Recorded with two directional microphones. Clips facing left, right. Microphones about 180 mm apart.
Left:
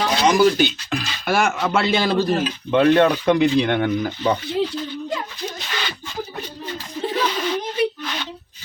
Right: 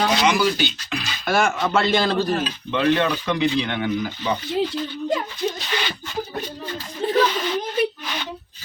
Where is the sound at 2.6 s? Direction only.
50° left (ahead or behind).